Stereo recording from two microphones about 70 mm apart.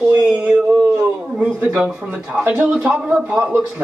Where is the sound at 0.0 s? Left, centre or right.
Centre.